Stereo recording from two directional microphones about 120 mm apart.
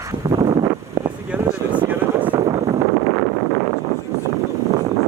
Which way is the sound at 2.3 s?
45° right (ahead or behind).